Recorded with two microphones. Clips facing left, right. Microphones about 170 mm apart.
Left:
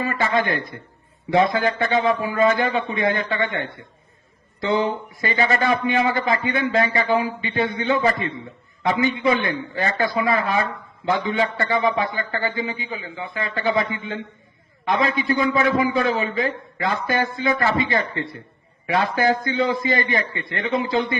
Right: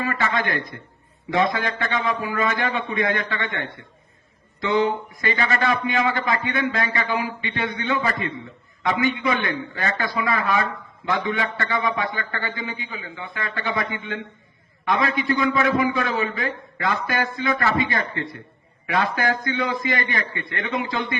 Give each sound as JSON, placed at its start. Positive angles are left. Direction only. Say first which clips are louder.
{"t": 0.0, "sound": "a man's voice", "louder": "left 3 dB", "side_deg": 25}